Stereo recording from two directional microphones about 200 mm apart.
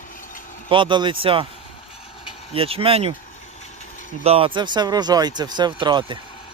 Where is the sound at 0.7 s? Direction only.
25° right (ahead or behind).